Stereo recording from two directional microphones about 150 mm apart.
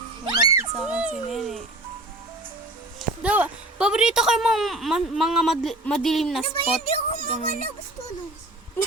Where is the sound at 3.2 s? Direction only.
10° right (ahead or behind).